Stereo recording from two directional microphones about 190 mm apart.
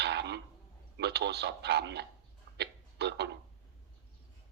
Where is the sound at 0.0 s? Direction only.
60° right (ahead or behind).